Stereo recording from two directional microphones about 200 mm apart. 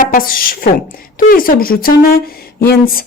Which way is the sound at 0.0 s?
45° left (ahead or behind).